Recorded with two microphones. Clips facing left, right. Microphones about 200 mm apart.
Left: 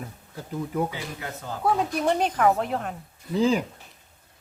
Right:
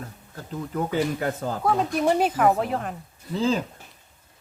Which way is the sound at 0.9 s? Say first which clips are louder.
Right 10 dB; 50° right (ahead or behind).